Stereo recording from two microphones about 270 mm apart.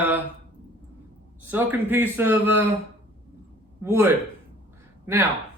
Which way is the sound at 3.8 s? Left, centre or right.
Centre.